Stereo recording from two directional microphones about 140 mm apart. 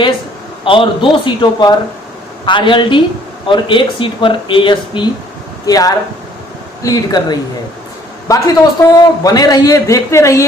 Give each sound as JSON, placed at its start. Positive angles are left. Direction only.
{"t": 0.6, "sound": "a man's voice", "side_deg": 35}